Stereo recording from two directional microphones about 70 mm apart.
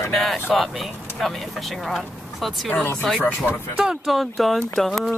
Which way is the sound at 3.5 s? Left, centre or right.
Left.